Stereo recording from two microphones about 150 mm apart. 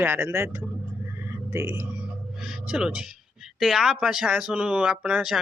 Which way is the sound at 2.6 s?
5° right (ahead or behind).